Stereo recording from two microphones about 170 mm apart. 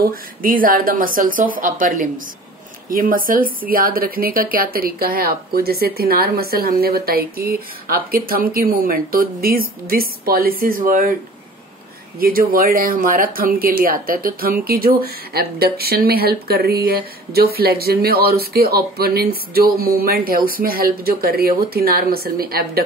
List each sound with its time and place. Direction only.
0.0 s speech: 55° right (ahead or behind)
12.2 s speech: 60° right (ahead or behind)